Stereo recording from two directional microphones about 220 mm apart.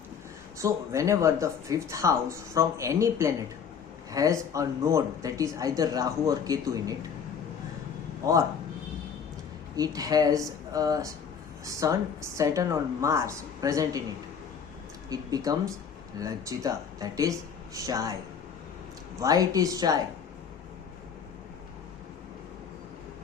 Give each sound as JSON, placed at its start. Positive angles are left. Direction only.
{"t": 0.6, "sound": "speech", "side_deg": -15}
{"t": 8.2, "sound": "speech", "side_deg": -15}
{"t": 9.7, "sound": "speech", "side_deg": -15}
{"t": 15.1, "sound": "speech", "side_deg": -15}
{"t": 19.2, "sound": "speech", "side_deg": -15}